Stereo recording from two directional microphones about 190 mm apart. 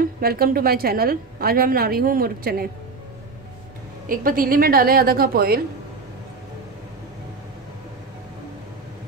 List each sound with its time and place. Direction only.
0.0 s a woman's voice: 55° right (ahead or behind)
4.1 s a woman's voice: 50° right (ahead or behind)